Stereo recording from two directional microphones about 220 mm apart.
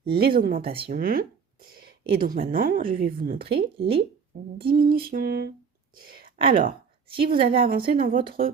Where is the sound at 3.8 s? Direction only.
25° right (ahead or behind).